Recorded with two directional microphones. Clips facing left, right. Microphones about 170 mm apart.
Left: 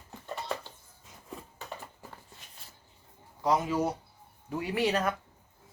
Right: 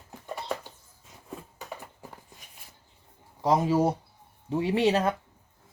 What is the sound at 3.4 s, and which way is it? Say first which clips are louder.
Speech: right 4 dB; 30° right (ahead or behind).